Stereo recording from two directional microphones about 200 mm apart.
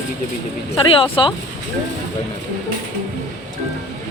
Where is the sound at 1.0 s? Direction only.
25° left (ahead or behind).